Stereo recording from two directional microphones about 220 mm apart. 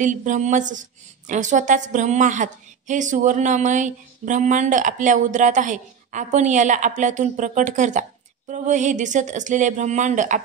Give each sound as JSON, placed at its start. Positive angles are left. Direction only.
{"t": 0.0, "sound": "a woman's voice", "side_deg": -35}